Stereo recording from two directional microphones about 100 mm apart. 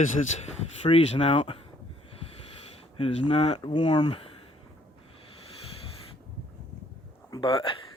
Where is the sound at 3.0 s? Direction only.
85° left.